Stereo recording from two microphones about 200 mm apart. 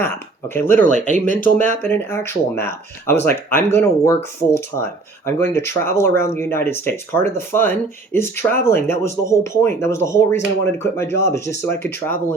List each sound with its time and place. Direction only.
0.0 s speech: 10° left (ahead or behind)
0.9 s speech: 35° right (ahead or behind)
1.7 s speech: 10° left (ahead or behind)